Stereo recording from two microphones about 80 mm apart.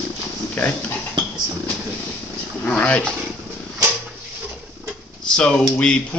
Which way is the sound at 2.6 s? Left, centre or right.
Centre.